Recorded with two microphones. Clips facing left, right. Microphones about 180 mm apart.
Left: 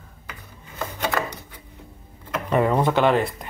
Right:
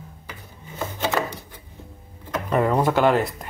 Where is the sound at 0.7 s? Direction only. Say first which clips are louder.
Right 1 dB; 5° right (ahead or behind).